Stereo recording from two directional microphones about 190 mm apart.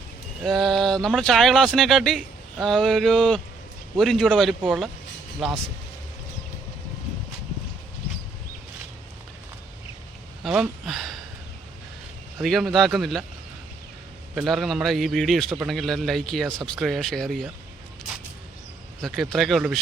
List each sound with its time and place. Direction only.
0.4 s speech: centre (ahead or behind)
10.4 s speech: centre (ahead or behind)
12.4 s speech: centre (ahead or behind)
14.3 s speech: centre (ahead or behind)
19.0 s speech: centre (ahead or behind)